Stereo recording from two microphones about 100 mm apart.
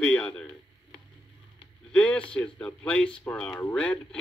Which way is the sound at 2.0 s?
15° left (ahead or behind).